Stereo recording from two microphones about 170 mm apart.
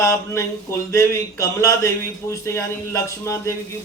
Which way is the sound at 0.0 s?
15° left (ahead or behind).